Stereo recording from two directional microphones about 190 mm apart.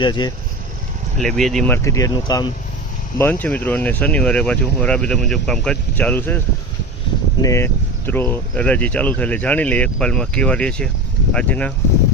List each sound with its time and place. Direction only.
0.0 s speech: 25° left (ahead or behind)
1.2 s speech: centre (ahead or behind); by 2.5 s 20° left (ahead or behind)
3.2 s speech: 10° left (ahead or behind)
7.4 s speech: 15° left (ahead or behind)